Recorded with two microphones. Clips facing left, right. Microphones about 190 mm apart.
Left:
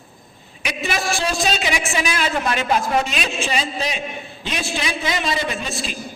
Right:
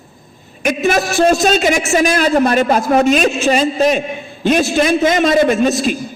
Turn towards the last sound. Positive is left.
turn(degrees=-45)  # may be behind; listen again after turning